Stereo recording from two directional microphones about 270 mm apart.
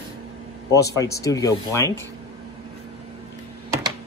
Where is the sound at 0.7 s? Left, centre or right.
Centre.